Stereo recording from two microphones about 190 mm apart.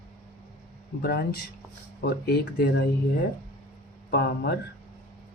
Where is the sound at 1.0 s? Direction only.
55° left (ahead or behind).